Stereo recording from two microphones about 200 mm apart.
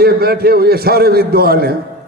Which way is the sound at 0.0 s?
50° right (ahead or behind).